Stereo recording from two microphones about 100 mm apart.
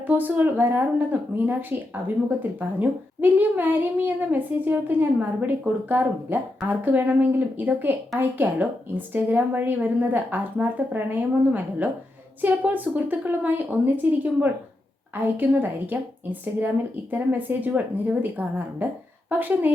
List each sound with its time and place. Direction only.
0.1 s a woman's voice: 20° right (ahead or behind)
15.1 s a woman's voice: 20° right (ahead or behind)